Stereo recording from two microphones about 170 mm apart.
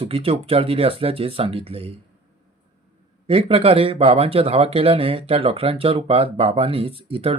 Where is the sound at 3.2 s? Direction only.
35° right (ahead or behind).